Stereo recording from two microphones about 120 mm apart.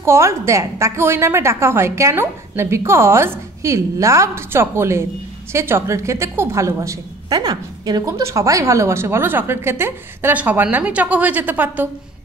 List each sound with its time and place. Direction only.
0.0 s a woman's voice: 20° right (ahead or behind)